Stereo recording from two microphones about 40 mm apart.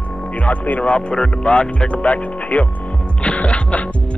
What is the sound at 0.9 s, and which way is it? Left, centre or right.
Speech, left.